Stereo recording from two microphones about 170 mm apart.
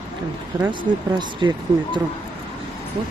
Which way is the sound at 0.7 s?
25° right (ahead or behind).